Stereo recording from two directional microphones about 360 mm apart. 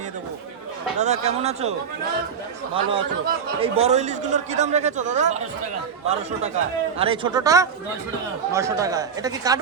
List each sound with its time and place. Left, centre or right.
0.9 s speech: centre
2.7 s a man's voice: centre
7.0 s speech: centre